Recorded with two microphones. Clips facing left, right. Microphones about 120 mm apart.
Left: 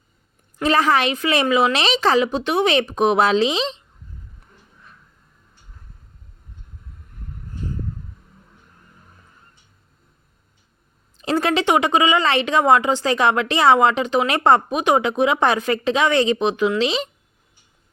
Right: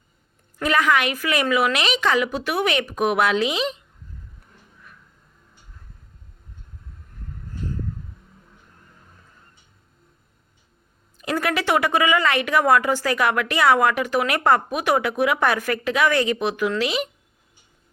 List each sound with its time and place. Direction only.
0.6 s speech: 30° left (ahead or behind)
11.2 s speech: 30° left (ahead or behind)